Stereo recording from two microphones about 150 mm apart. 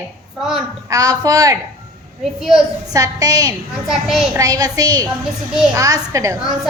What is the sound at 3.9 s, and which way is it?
Speech, 5° right (ahead or behind).